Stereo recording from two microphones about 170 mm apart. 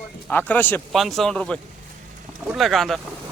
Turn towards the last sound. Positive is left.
turn(degrees=0)  # may be behind; listen again after turning